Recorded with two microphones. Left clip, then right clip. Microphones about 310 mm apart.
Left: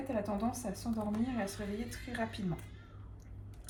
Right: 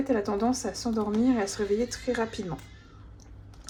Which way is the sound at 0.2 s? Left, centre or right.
Right.